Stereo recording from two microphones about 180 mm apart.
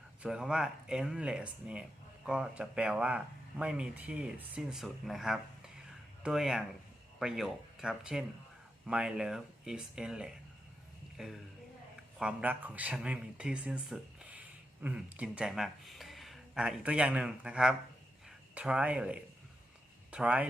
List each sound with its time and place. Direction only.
0.2 s speech: 5° right (ahead or behind)